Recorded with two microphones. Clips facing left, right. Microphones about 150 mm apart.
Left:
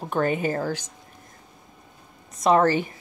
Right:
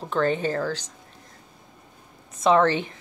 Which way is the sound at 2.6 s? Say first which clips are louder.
Left 1 dB; 10° left (ahead or behind).